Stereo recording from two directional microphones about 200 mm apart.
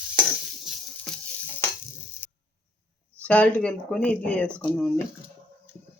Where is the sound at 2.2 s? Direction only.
10° left (ahead or behind).